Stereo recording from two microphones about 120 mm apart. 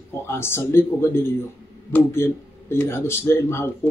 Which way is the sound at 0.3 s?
20° left (ahead or behind).